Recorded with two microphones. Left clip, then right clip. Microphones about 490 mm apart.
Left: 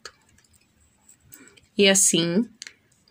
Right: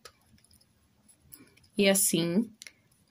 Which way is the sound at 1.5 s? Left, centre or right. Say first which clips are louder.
Left 7 dB; right.